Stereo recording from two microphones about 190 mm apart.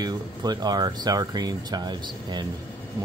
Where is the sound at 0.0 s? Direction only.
20° right (ahead or behind).